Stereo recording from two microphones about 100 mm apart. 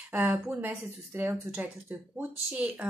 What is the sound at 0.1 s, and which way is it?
Speech, 20° right (ahead or behind).